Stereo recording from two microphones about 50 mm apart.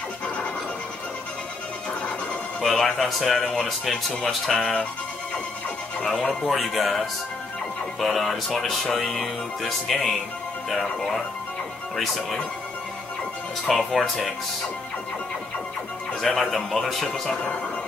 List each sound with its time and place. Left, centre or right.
2.6 s speech: centre
6.0 s speech: centre
13.7 s speech: centre
16.2 s speech: centre